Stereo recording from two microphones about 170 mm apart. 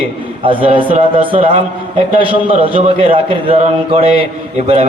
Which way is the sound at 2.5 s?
35° right (ahead or behind).